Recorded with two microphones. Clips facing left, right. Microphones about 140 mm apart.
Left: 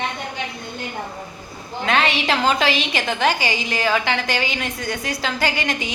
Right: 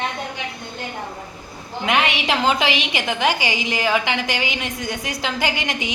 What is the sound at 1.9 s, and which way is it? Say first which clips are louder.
A woman's voice: left 1 dB; 15° right (ahead or behind).